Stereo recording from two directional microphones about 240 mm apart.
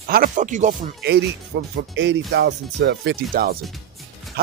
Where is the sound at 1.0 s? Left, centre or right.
Right.